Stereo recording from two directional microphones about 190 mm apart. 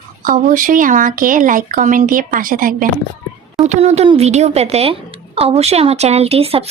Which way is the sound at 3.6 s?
35° right (ahead or behind).